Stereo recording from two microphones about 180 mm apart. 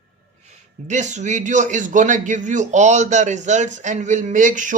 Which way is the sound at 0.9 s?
40° right (ahead or behind).